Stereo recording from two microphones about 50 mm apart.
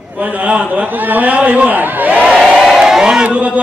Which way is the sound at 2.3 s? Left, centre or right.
Centre.